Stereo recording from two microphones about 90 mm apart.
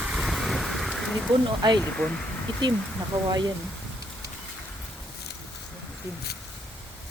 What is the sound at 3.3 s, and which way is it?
Speech, 50° right (ahead or behind).